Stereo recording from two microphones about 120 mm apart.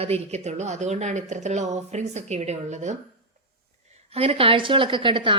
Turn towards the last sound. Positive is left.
turn(degrees=-45)  # may be behind; listen again after turning